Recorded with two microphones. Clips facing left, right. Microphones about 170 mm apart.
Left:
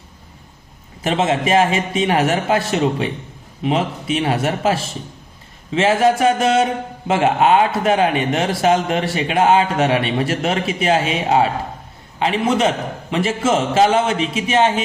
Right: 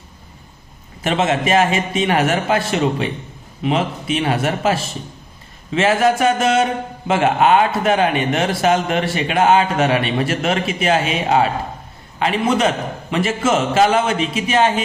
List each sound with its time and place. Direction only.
1.0 s a man's voice: 30° left (ahead or behind)